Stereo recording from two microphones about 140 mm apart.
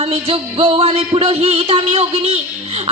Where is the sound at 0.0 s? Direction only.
45° right (ahead or behind).